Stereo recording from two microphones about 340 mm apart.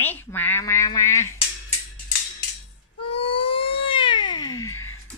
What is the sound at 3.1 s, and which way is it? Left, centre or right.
Cat, centre.